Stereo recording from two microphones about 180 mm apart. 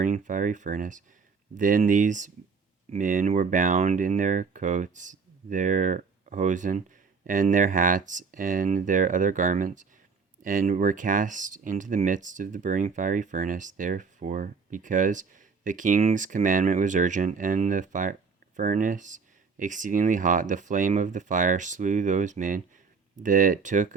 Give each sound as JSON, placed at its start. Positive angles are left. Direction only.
{"t": 0.0, "sound": "speech", "side_deg": -45}